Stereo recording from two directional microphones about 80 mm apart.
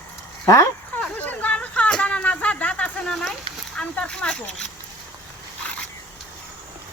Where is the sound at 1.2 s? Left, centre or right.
Centre.